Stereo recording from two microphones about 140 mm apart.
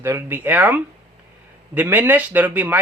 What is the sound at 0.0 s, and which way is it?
Speech, 15° right (ahead or behind).